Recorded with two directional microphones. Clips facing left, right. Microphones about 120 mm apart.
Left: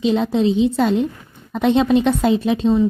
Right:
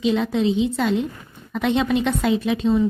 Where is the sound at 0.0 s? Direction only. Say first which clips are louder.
Left 3 dB; 30° left (ahead or behind).